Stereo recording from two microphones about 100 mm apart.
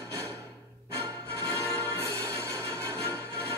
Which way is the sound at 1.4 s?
25° right (ahead or behind).